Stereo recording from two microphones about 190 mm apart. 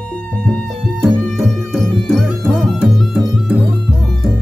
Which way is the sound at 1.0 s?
Centre (ahead or behind).